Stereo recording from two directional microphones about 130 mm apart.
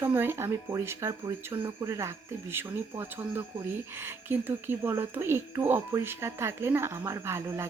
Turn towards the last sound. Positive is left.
turn(degrees=-20)  # may be behind; listen again after turning